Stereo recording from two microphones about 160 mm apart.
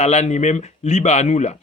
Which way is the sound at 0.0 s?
45° left (ahead or behind).